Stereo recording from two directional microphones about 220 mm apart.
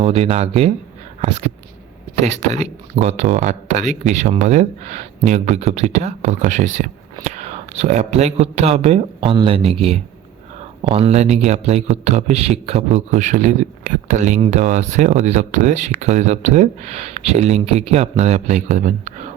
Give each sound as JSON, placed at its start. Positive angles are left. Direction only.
{"t": 0.0, "sound": "speech", "side_deg": -25}
{"t": 2.1, "sound": "a man's voice", "side_deg": -30}